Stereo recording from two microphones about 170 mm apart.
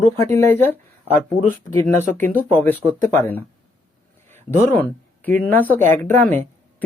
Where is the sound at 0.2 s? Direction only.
15° left (ahead or behind).